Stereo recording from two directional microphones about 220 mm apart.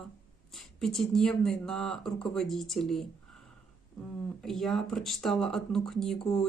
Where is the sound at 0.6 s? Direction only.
Centre (ahead or behind).